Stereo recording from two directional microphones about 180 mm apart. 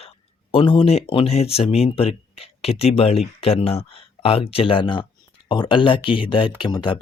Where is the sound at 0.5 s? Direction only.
30° left (ahead or behind).